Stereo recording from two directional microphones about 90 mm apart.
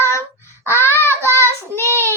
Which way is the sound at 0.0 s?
30° left (ahead or behind).